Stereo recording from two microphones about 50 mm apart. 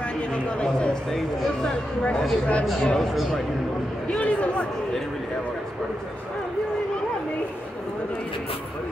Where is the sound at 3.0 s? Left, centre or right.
Centre.